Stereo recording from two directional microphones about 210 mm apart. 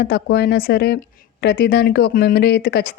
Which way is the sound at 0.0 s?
45° left (ahead or behind).